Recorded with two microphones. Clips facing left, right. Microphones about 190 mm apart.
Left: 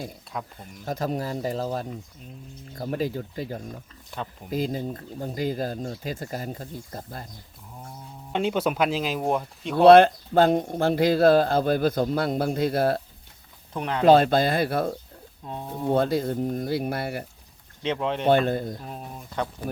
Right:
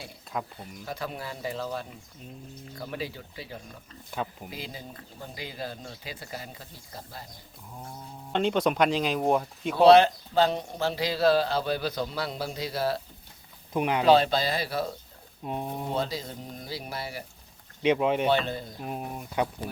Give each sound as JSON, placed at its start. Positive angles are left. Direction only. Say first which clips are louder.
{"t": 0.3, "sound": "speech", "louder": "right 1 dB", "side_deg": 0}
{"t": 0.9, "sound": "a man's voice", "louder": "left 8 dB", "side_deg": 40}
{"t": 4.1, "sound": "speech", "louder": "right 1 dB", "side_deg": -5}
{"t": 4.4, "sound": "a man's voice", "louder": "left 12 dB", "side_deg": 45}
{"t": 8.3, "sound": "speech", "louder": "even", "side_deg": 5}
{"t": 9.8, "sound": "a man's voice", "louder": "left 3 dB", "side_deg": 55}
{"t": 13.7, "sound": "speech", "louder": "right 2 dB", "side_deg": -10}
{"t": 14.0, "sound": "a man's voice", "louder": "left 5 dB", "side_deg": 50}
{"t": 15.4, "sound": "speech", "louder": "right 3 dB", "side_deg": -15}
{"t": 15.9, "sound": "speech", "louder": "left 12 dB", "side_deg": 55}
{"t": 17.8, "sound": "speech", "louder": "right 3 dB", "side_deg": -10}
{"t": 18.3, "sound": "a man's voice", "louder": "left 6 dB", "side_deg": 50}
{"t": 18.8, "sound": "speech", "louder": "right 3 dB", "side_deg": -15}